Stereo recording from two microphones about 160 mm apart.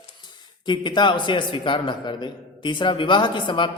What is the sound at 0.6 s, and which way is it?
A man's voice, 25° left (ahead or behind).